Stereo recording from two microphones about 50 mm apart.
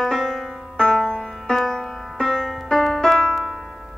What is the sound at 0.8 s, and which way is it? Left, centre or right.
Music, centre.